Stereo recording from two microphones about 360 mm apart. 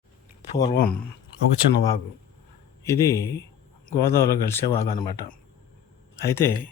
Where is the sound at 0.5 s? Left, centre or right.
Centre.